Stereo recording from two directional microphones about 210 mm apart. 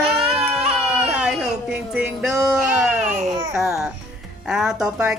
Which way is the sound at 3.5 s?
Centre (ahead or behind).